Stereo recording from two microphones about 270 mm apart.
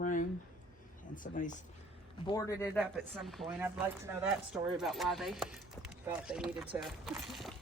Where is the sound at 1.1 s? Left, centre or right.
Left.